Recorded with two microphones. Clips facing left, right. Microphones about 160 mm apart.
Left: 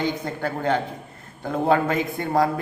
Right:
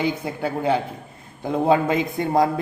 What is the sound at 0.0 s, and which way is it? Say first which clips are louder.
A man's voice: right 2 dB; 10° right (ahead or behind).